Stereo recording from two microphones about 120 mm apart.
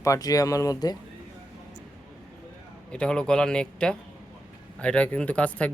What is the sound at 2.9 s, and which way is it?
Speech, 5° left (ahead or behind).